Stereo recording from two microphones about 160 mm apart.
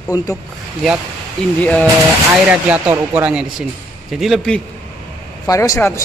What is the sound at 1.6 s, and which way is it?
Speech, 10° left (ahead or behind).